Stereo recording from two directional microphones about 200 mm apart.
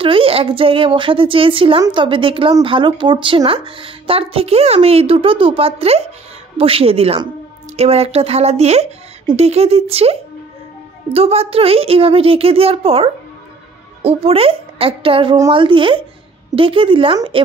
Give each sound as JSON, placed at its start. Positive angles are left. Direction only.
{"t": 0.0, "sound": "a woman's voice", "side_deg": -25}
{"t": 11.1, "sound": "a woman's voice", "side_deg": -30}